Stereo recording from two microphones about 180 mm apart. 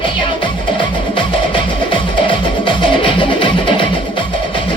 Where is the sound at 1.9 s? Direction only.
30° left (ahead or behind).